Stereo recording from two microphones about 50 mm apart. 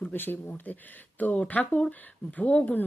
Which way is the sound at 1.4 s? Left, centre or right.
Left.